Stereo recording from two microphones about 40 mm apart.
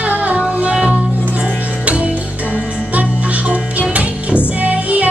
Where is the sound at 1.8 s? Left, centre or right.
Right.